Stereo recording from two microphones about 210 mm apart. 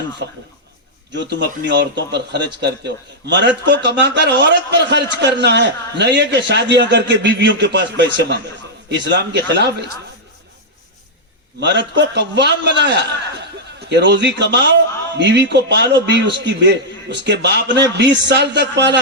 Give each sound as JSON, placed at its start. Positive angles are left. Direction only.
{"t": 1.1, "sound": "a man's voice", "side_deg": -55}
{"t": 11.6, "sound": "a man's voice", "side_deg": -55}